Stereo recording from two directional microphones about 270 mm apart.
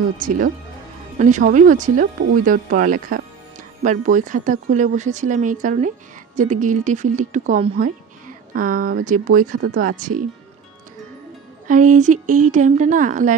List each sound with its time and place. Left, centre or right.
0.2 s speech: right
11.6 s speech: right